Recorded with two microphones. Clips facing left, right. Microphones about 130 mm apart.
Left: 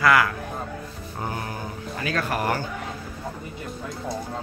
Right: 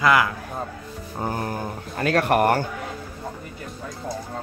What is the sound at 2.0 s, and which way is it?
Speech, 65° right (ahead or behind).